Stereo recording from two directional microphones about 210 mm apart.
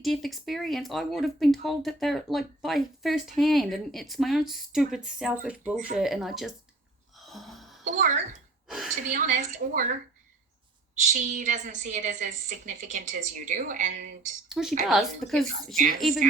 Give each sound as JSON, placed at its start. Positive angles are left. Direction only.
{"t": 0.0, "sound": "speech", "side_deg": 0}
{"t": 7.3, "sound": "music", "side_deg": 0}
{"t": 7.9, "sound": "a woman's voice", "side_deg": -35}
{"t": 8.6, "sound": "speech", "side_deg": 0}
{"t": 9.0, "sound": "a woman's voice", "side_deg": -40}
{"t": 11.0, "sound": "a woman's voice", "side_deg": -35}
{"t": 14.5, "sound": "a woman's voice", "side_deg": 0}